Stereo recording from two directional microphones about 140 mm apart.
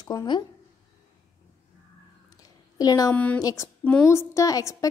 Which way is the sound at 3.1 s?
10° left (ahead or behind).